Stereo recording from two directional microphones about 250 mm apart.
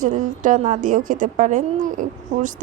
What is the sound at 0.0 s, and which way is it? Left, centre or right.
A woman's voice, right.